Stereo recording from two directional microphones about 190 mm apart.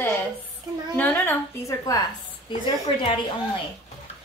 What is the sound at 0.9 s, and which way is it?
A woman's voice, 10° left (ahead or behind).